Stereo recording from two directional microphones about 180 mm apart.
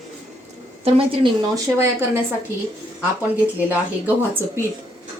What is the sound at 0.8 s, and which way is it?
A woman's voice, 30° right (ahead or behind).